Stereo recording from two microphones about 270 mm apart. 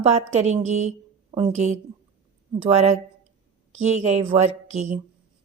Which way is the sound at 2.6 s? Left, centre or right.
Right.